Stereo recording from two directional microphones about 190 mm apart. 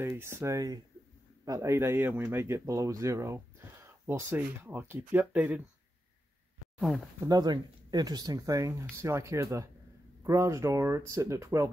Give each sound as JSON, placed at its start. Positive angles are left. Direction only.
{"t": 0.0, "sound": "speech", "side_deg": -15}
{"t": 7.2, "sound": "speech", "side_deg": -20}